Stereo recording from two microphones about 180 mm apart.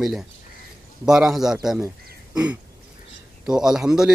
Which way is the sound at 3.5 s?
5° right (ahead or behind).